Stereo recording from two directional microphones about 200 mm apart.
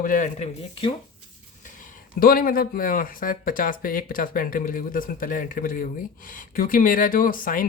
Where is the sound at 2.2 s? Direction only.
45° left (ahead or behind).